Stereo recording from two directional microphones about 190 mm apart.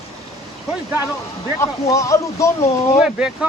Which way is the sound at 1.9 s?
15° left (ahead or behind).